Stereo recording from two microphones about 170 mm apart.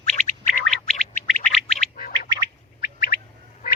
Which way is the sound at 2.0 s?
55° left (ahead or behind).